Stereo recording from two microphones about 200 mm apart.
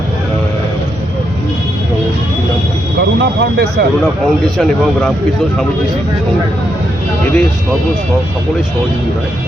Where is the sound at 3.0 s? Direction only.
55° right (ahead or behind).